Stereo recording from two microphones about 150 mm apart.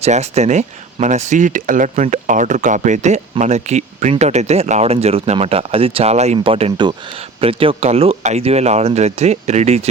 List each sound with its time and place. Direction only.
0.0 s speech: 45° right (ahead or behind)